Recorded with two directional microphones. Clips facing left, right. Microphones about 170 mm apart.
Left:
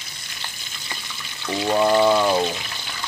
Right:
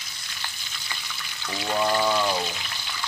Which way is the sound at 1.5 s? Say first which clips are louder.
Left 6 dB; 30° left (ahead or behind).